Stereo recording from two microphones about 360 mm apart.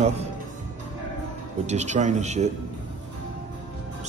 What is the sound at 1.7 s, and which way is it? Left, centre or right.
Speech, centre.